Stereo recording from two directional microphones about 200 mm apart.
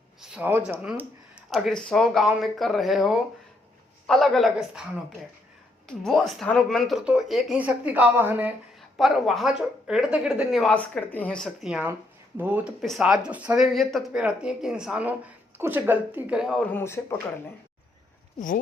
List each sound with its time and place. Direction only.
0.2 s speech: 10° right (ahead or behind)
6.1 s speech: centre (ahead or behind)
16.7 s speech: 15° left (ahead or behind)
18.3 s speech: 45° left (ahead or behind)